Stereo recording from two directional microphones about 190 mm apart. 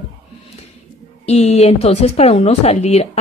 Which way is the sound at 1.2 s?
35° left (ahead or behind).